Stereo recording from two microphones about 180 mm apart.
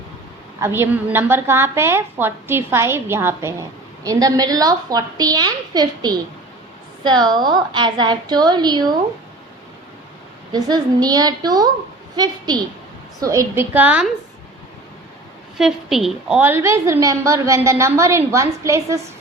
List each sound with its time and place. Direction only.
0.6 s a woman's voice: 10° right (ahead or behind)
10.5 s a woman's voice: 20° right (ahead or behind)
15.5 s a woman's voice: centre (ahead or behind); by 18.9 s 15° right (ahead or behind)